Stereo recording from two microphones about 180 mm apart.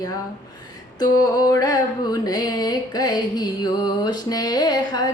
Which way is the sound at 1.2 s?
20° left (ahead or behind).